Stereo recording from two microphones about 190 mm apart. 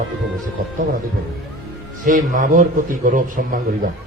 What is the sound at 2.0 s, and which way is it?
A man's voice, 45° right (ahead or behind).